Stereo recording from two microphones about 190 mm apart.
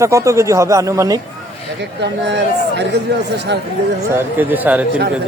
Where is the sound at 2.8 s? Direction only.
65° right (ahead or behind).